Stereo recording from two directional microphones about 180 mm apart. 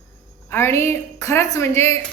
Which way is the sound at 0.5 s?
15° left (ahead or behind).